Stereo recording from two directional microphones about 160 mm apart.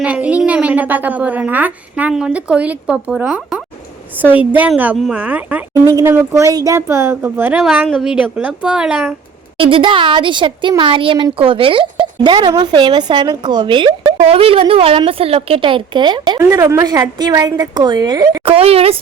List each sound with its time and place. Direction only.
0.0 s a woman's voice: 10° right (ahead or behind)
9.6 s a woman's voice: 35° right (ahead or behind)
18.5 s speech: 40° right (ahead or behind)